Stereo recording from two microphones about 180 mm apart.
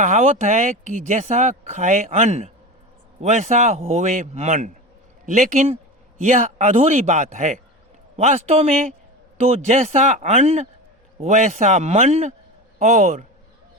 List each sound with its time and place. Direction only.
0.0 s speech: 40° right (ahead or behind)